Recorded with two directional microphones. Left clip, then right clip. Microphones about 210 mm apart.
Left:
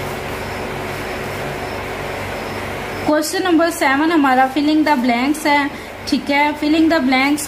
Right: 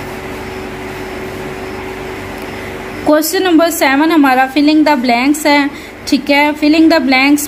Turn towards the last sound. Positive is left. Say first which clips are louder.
# right 5 dB
turn(degrees=-35)  # may be behind; listen again after turning